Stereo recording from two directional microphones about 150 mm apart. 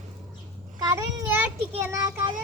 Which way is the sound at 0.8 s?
20° right (ahead or behind).